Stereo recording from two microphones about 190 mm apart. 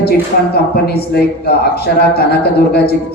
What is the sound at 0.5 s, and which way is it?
Speech, 55° left (ahead or behind).